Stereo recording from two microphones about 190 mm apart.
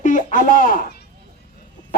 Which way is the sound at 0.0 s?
45° left (ahead or behind).